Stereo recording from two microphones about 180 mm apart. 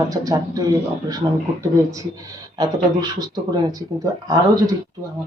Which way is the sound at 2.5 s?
20° right (ahead or behind).